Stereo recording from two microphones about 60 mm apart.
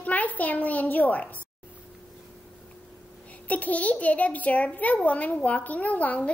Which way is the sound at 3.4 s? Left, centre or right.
Left.